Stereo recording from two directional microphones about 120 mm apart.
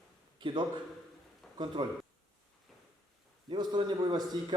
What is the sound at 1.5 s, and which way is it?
Speech, 40° right (ahead or behind).